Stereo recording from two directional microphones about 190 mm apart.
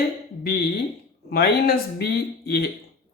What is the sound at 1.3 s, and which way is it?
Speech, 55° left (ahead or behind).